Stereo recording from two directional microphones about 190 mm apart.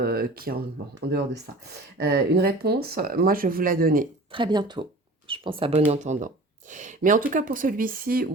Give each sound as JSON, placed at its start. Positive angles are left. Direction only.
{"t": 0.0, "sound": "speech", "side_deg": -50}
{"t": 4.3, "sound": "speech", "side_deg": -25}